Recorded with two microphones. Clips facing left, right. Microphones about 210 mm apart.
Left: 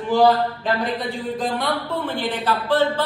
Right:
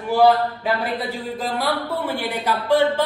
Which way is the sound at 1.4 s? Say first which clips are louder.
Right 1 dB; centre (ahead or behind).